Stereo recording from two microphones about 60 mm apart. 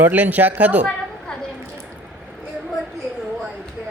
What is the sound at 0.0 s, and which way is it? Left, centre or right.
Speech, right.